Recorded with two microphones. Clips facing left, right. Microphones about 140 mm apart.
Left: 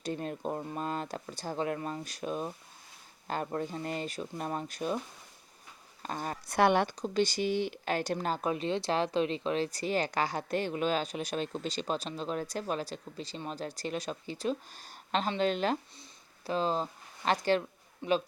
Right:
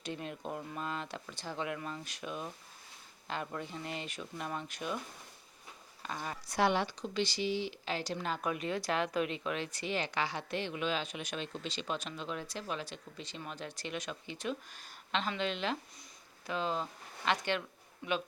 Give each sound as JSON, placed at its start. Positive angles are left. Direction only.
{"t": 0.0, "sound": "speech", "side_deg": 40}
{"t": 6.0, "sound": "speech", "side_deg": 40}
{"t": 8.3, "sound": "speech", "side_deg": 30}
{"t": 18.0, "sound": "a man's voice", "side_deg": 25}